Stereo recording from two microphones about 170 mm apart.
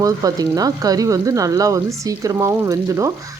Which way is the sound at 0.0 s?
20° right (ahead or behind).